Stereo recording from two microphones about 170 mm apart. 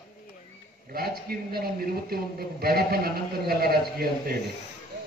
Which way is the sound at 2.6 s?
65° right (ahead or behind).